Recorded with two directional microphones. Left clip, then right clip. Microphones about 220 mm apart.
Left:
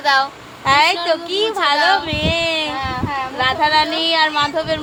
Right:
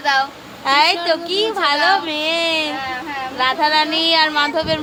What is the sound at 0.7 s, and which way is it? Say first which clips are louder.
Speech: left 1 dB; 5° left (ahead or behind).